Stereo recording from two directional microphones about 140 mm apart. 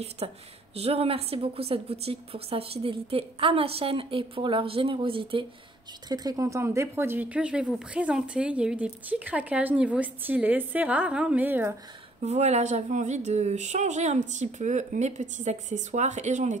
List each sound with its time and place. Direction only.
0.2 s a woman's voice: 45° right (ahead or behind)
6.0 s speech: 30° right (ahead or behind)
12.2 s a woman's voice: 50° right (ahead or behind)